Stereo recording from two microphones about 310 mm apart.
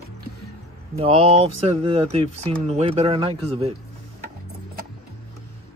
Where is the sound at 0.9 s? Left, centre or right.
Centre.